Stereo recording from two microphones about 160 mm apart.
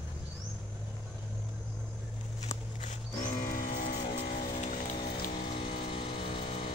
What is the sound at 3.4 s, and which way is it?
Music, 60° left (ahead or behind).